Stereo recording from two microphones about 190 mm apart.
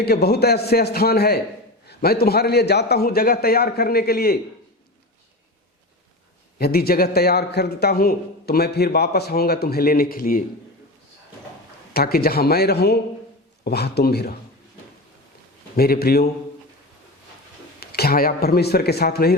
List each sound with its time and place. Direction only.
0.0 s a man's voice: 60° left (ahead or behind)
6.6 s a man's voice: 55° left (ahead or behind)
11.9 s a man's voice: 55° left (ahead or behind)
15.7 s a man's voice: 55° left (ahead or behind)
17.7 s a man's voice: 55° left (ahead or behind)